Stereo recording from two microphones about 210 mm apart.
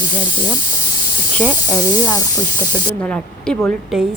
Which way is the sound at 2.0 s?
15° left (ahead or behind).